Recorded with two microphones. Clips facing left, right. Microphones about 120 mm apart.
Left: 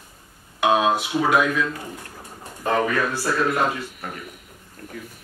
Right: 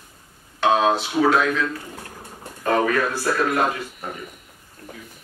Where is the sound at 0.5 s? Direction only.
10° left (ahead or behind).